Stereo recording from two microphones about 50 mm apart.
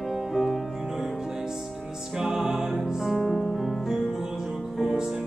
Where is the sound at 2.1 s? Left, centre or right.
Centre.